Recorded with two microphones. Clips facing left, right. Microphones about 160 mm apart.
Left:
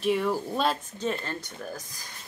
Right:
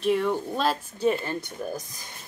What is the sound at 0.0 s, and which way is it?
Speech, centre (ahead or behind).